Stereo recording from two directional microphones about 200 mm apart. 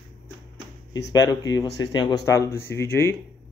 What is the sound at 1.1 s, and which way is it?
Speech, 20° left (ahead or behind).